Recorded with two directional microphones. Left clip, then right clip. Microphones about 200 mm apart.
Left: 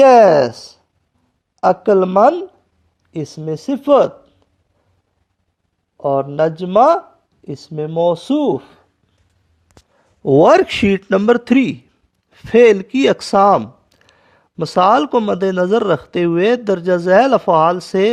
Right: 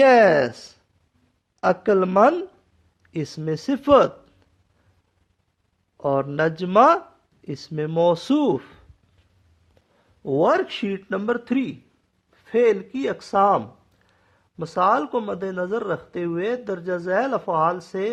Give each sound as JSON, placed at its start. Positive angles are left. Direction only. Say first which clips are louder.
{"t": 0.0, "sound": "a woman's voice", "louder": "left 7 dB", "side_deg": 15}
{"t": 6.0, "sound": "a man's voice", "louder": "left 6 dB", "side_deg": 5}
{"t": 10.2, "sound": "speech", "louder": "left 10 dB", "side_deg": 35}